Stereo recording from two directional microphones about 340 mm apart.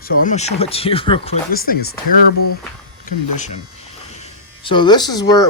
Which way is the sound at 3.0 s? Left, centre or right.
Left.